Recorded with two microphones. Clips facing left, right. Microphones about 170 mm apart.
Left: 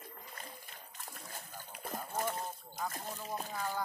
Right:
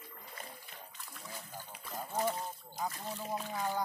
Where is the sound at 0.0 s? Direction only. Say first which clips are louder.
Even; 45° left (ahead or behind).